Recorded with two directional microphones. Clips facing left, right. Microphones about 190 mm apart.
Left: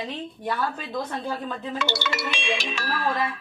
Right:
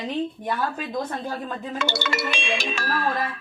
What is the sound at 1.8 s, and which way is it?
Music, 50° right (ahead or behind).